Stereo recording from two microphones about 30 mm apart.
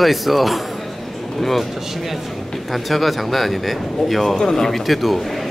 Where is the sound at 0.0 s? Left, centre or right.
Centre.